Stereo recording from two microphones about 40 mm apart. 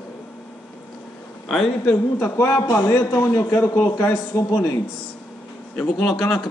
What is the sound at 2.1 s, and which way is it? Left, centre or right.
Speech, left.